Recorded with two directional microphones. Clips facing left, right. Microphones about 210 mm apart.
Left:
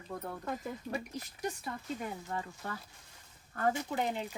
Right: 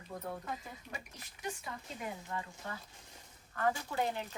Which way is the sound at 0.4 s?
50° left (ahead or behind).